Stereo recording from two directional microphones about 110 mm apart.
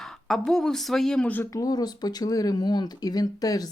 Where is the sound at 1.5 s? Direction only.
35° left (ahead or behind).